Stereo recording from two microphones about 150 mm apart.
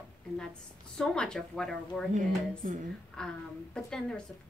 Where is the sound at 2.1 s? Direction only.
55° right (ahead or behind).